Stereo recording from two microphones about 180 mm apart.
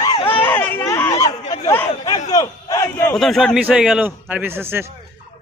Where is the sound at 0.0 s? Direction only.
25° left (ahead or behind).